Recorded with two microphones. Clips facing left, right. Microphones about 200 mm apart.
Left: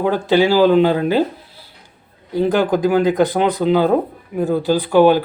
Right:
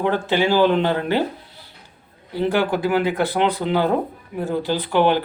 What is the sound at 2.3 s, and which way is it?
Speech, 15° left (ahead or behind).